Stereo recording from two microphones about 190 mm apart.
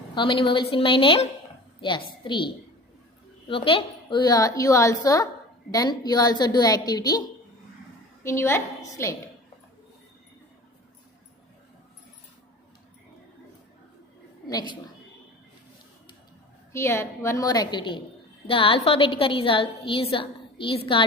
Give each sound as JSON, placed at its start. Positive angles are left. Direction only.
{"t": 0.1, "sound": "a woman's voice", "side_deg": 25}
{"t": 3.5, "sound": "a woman's voice", "side_deg": 30}
{"t": 14.4, "sound": "a woman's voice", "side_deg": 20}
{"t": 16.7, "sound": "a woman's voice", "side_deg": 15}